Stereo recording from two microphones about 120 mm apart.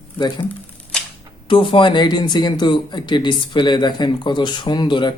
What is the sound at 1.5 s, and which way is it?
Speech, 45° left (ahead or behind).